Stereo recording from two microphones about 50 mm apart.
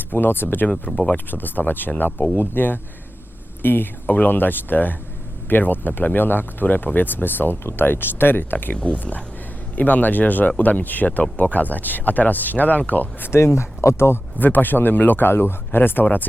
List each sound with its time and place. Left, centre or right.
0.1 s speech: left
8.7 s speech: left
13.3 s speech: left
14.3 s speech: left